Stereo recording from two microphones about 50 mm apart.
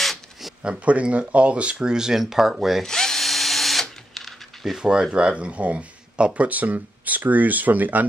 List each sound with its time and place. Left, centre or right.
0.0 s a sound: centre
0.8 s speech: right; by 2.8 s centre
2.8 s drill: centre
4.1 s typing: centre
4.7 s speech: centre; by 8.1 s right